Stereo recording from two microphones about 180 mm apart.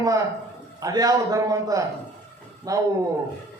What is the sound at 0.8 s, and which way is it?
A man's voice, 20° right (ahead or behind).